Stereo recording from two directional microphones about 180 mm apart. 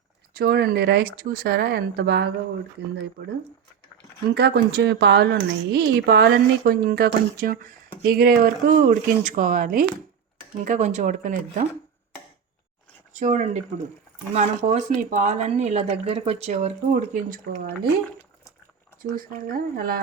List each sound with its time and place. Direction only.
0.3 s speech: 60° right (ahead or behind); by 11.6 s 45° right (ahead or behind)
13.1 s speech: 40° right (ahead or behind); by 17.9 s 60° right (ahead or behind)
19.1 s speech: 50° right (ahead or behind)